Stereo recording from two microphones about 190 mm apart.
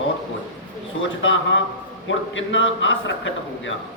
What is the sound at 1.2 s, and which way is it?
A man's voice, 80° left.